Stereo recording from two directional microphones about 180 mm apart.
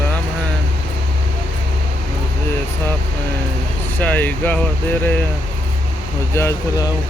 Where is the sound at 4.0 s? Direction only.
10° left (ahead or behind).